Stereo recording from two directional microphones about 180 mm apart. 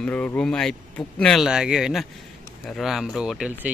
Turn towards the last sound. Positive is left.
turn(degrees=-5)  # may be behind; listen again after turning